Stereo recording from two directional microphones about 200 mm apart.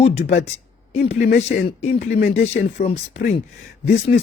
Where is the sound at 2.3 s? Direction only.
35° left (ahead or behind).